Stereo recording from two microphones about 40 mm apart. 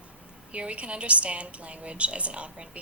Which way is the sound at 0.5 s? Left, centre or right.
Right.